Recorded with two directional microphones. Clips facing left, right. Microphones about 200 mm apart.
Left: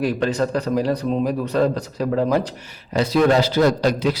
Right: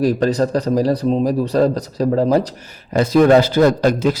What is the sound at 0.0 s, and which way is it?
A man's voice, 40° right (ahead or behind).